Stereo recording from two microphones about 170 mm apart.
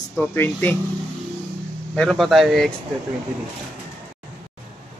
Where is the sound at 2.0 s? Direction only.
Centre (ahead or behind).